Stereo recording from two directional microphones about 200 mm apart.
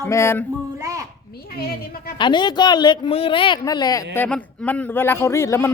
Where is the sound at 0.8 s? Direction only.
15° right (ahead or behind).